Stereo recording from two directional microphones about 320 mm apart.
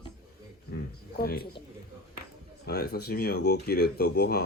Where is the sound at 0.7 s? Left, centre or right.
Left.